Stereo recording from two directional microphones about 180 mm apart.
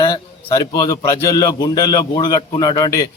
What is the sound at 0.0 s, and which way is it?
Speech, 25° left (ahead or behind).